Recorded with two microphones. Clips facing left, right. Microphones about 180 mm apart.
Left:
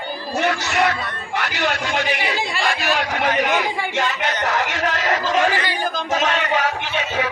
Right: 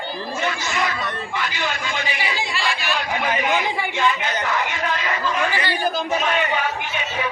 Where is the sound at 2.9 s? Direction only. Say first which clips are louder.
Left 3 dB; 75° left (ahead or behind).